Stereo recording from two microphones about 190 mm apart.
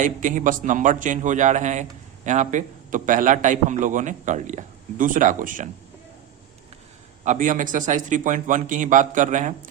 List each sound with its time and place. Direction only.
0.0 s a man's voice: 40° right (ahead or behind)
7.3 s a man's voice: 45° right (ahead or behind)